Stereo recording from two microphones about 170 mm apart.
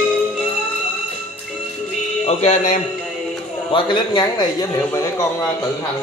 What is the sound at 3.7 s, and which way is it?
A man's voice, 25° left (ahead or behind).